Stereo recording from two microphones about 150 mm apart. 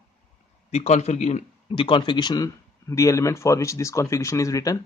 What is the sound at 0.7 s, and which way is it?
A man's voice, 50° left (ahead or behind).